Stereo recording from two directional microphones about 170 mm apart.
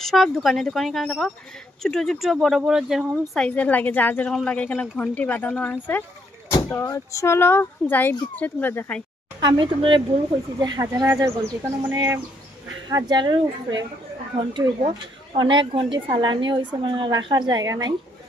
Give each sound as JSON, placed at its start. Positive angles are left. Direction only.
{"t": 0.0, "sound": "speech", "side_deg": 0}
{"t": 9.4, "sound": "a woman's voice", "side_deg": -25}